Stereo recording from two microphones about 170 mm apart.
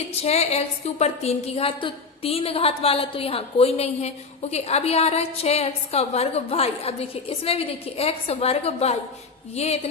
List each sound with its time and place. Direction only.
0.2 s a woman's voice: 40° left (ahead or behind)